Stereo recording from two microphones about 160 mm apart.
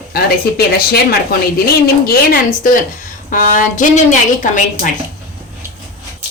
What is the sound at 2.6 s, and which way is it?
A woman's voice, 60° left (ahead or behind).